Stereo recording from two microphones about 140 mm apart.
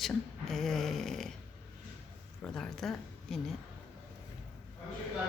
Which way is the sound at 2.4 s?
5° left (ahead or behind).